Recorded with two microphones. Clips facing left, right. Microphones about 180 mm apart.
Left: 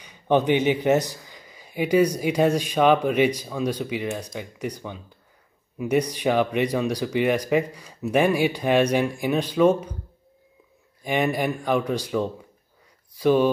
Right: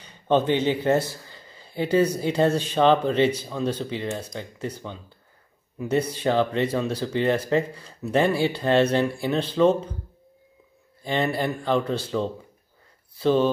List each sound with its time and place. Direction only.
0.0 s speech: 15° left (ahead or behind)
11.0 s speech: 15° left (ahead or behind)